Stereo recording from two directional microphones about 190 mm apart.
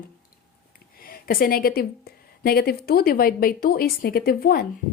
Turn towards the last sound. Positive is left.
turn(degrees=50)  # may be behind; listen again after turning